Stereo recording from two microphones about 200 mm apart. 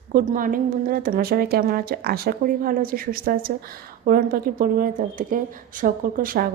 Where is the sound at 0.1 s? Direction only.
40° right (ahead or behind).